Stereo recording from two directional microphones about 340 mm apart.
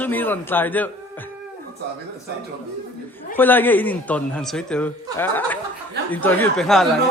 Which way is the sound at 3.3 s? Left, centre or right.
Centre.